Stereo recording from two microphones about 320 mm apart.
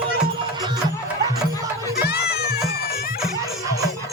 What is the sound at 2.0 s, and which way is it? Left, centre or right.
Music, left.